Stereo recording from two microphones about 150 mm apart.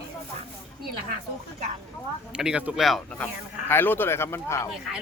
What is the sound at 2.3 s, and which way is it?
Speech, 5° right (ahead or behind).